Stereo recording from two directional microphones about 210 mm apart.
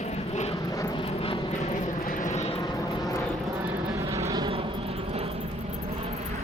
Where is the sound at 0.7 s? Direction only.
15° left (ahead or behind).